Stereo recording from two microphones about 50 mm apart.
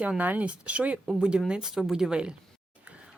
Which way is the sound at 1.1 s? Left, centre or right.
Centre.